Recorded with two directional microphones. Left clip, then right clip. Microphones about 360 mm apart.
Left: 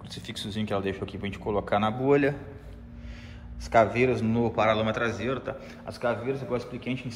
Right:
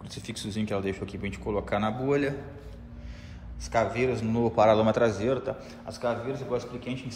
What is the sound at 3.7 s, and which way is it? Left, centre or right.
A man's voice, centre.